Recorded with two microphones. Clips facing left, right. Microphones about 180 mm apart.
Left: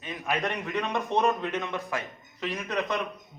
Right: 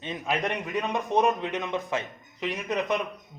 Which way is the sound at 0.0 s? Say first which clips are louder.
Right 1 dB; 20° right (ahead or behind).